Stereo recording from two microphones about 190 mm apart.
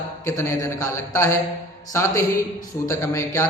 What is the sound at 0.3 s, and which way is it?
A man's voice, 15° left (ahead or behind).